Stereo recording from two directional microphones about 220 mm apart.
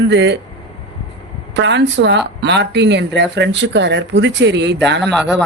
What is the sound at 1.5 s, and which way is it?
Speech, 55° right (ahead or behind).